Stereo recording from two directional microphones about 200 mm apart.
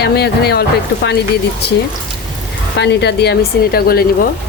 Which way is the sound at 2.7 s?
60° left (ahead or behind).